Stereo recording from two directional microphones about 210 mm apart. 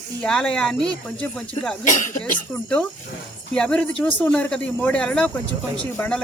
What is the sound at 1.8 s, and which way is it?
Speech, 40° left (ahead or behind).